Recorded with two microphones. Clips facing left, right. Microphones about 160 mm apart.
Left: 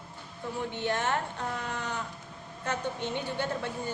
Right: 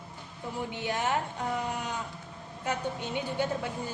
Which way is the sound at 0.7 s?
10° right (ahead or behind).